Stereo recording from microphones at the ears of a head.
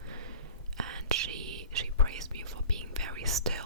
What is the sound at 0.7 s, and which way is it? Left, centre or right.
Whispering, right.